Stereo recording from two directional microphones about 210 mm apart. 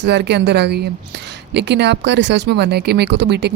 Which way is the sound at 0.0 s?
55° right (ahead or behind).